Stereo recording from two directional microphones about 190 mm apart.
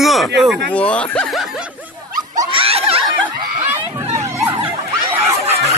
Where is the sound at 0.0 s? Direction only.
Centre (ahead or behind).